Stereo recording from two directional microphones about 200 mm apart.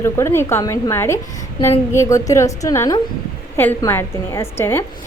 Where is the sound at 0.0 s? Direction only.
10° left (ahead or behind).